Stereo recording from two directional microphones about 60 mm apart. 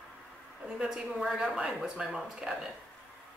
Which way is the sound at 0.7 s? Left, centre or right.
Centre.